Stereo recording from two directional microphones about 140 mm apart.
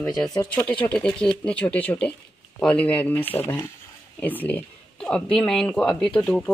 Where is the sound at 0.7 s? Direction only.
10° left (ahead or behind).